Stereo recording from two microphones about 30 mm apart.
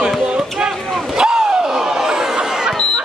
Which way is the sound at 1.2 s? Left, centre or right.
Centre.